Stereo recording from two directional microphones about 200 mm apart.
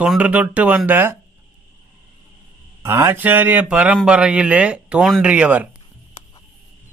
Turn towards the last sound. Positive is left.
turn(degrees=-5)  # may be behind; listen again after turning